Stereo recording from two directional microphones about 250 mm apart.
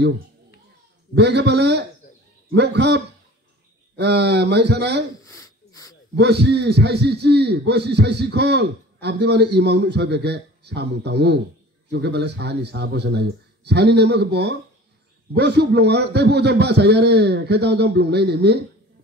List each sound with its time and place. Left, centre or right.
1.1 s speech: right
5.2 s a sound: centre
6.1 s a man's voice: right